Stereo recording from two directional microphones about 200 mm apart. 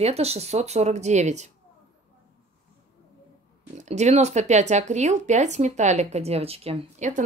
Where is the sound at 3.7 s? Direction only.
35° right (ahead or behind).